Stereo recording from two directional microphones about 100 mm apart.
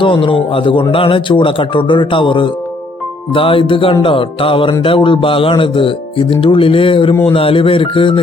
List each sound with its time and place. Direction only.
0.0 s speech: 55° left (ahead or behind)